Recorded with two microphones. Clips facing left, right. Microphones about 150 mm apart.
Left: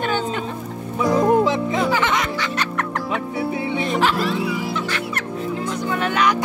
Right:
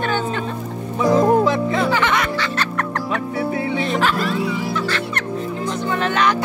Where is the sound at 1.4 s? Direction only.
15° left (ahead or behind).